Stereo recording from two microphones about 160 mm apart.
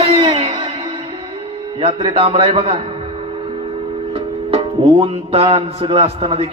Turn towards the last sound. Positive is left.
turn(degrees=-40)  # may be behind; listen again after turning